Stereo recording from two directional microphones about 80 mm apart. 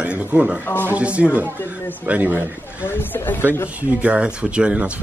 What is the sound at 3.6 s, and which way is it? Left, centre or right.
Speech, right.